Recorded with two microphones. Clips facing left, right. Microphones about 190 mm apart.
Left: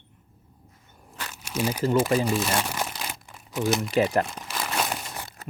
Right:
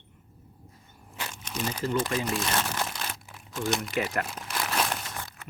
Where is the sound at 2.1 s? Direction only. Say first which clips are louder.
Left 5 dB; 5° left (ahead or behind).